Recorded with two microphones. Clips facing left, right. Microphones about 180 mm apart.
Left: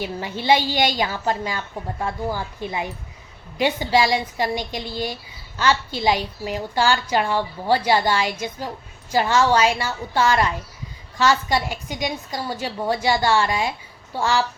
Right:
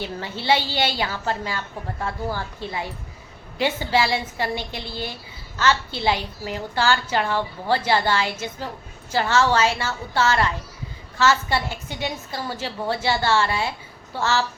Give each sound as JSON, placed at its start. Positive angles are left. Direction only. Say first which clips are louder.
{"t": 0.0, "sound": "a woman's voice", "louder": "left 2 dB", "side_deg": 15}